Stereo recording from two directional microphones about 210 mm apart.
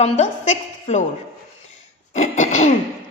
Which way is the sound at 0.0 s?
30° left (ahead or behind).